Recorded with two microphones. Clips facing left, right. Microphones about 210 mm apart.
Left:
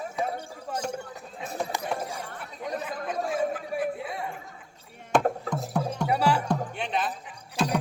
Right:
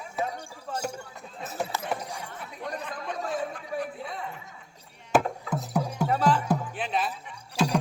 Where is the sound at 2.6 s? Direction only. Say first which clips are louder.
Left 3 dB; 10° left (ahead or behind).